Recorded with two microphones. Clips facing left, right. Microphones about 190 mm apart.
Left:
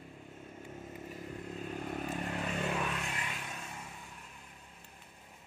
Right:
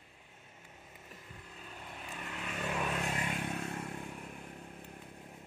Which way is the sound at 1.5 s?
45° left (ahead or behind).